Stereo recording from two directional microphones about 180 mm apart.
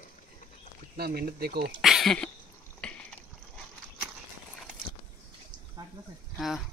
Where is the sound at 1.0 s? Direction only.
60° right (ahead or behind).